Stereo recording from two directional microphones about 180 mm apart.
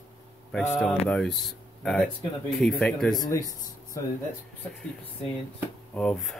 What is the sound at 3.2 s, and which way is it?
Speech, 20° left (ahead or behind).